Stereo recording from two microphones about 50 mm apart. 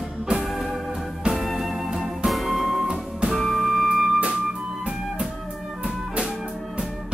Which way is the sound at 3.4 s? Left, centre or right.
Centre.